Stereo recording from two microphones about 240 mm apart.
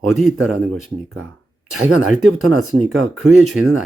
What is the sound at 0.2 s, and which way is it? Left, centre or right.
Speech, centre.